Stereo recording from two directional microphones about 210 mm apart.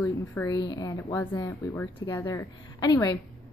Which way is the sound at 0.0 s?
10° left (ahead or behind).